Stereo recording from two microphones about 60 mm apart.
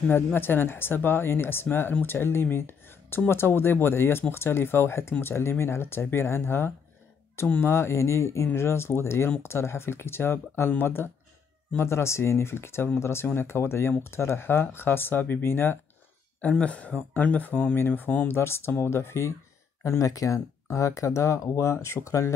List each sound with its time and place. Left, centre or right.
0.1 s speech: left
2.5 s a sound: left
3.3 s speech: left
16.3 s speech: left
19.8 s speech: left